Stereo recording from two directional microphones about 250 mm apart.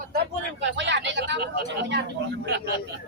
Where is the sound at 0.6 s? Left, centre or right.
Right.